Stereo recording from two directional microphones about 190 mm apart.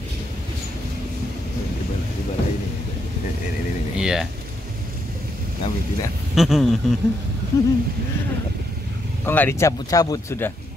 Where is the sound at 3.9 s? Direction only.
5° right (ahead or behind).